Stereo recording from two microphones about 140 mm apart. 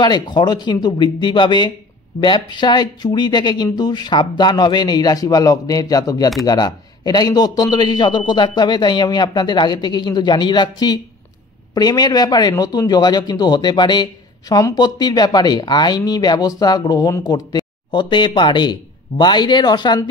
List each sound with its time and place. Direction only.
0.0 s a man's voice: 30° left (ahead or behind)